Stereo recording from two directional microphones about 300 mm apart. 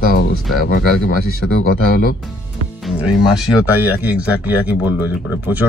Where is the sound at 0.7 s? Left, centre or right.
Left.